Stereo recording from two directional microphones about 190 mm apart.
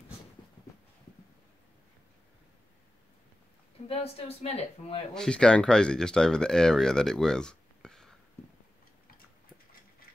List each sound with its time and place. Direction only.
3.8 s speech: 30° left (ahead or behind)
5.1 s speech: 5° left (ahead or behind)